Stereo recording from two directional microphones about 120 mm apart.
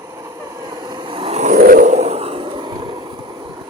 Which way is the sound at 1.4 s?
90° right.